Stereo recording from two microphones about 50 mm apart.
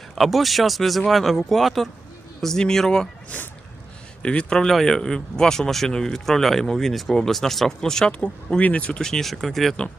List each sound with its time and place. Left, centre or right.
0.2 s speech: centre
2.4 s speech: centre
3.2 s speech: left
4.2 s speech: left
4.5 s speech: centre
8.2 s speech: left; by 9.7 s centre